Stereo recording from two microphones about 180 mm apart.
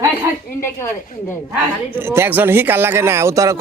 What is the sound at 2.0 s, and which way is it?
Speech, 10° right (ahead or behind).